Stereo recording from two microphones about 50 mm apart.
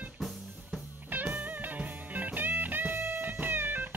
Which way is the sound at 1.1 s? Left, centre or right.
Right.